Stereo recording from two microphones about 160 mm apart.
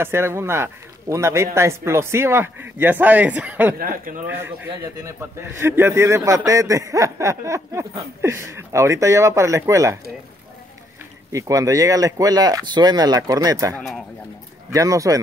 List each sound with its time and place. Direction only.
0.0 s a man's voice: 15° right (ahead or behind)
3.7 s speech: 60° right (ahead or behind)
4.3 s a man's voice: 15° right (ahead or behind)
11.3 s speech: 20° right (ahead or behind)
13.7 s speech: centre (ahead or behind)
14.7 s speech: 20° right (ahead or behind)